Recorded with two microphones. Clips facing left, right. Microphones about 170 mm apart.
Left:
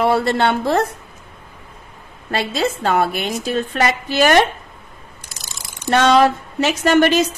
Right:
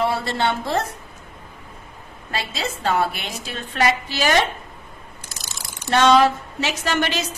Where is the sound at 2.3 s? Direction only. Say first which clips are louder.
Left 8 dB; 55° left (ahead or behind).